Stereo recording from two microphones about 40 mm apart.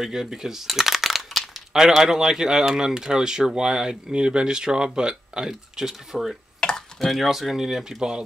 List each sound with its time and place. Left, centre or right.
0.0 s speech: centre
6.6 s a sound: left
7.0 s speech: centre